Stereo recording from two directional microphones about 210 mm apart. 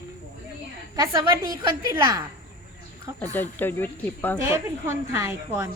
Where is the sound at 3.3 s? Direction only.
10° left (ahead or behind).